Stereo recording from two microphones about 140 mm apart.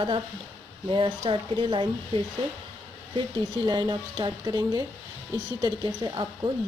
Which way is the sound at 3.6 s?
30° right (ahead or behind).